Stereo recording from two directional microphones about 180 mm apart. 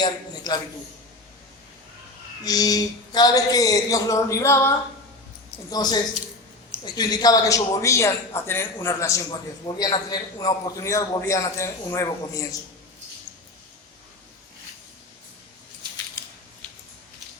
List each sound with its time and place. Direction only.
0.0 s a sound: 20° left (ahead or behind)
2.4 s speech: 20° left (ahead or behind)
5.7 s speech: 20° left (ahead or behind)